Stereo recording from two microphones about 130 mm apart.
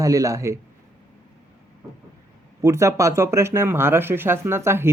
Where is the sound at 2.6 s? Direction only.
20° right (ahead or behind).